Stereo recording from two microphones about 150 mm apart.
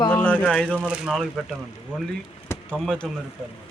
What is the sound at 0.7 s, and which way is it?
Speech, 5° right (ahead or behind).